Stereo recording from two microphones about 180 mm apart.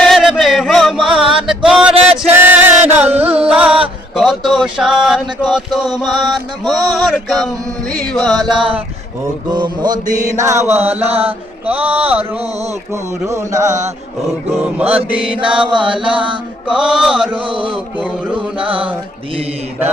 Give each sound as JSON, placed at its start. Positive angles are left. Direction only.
{"t": 0.0, "sound": "music", "side_deg": 0}
{"t": 3.1, "sound": "music", "side_deg": -35}
{"t": 3.5, "sound": "music", "side_deg": -5}
{"t": 4.1, "sound": "a sound", "side_deg": 0}
{"t": 6.7, "sound": "music", "side_deg": 0}
{"t": 9.5, "sound": "mantra", "side_deg": -25}
{"t": 10.3, "sound": "speech", "side_deg": -15}
{"t": 15.5, "sound": "mantra", "side_deg": -25}
{"t": 16.6, "sound": "music", "side_deg": -5}
{"t": 17.3, "sound": "mantra", "side_deg": -30}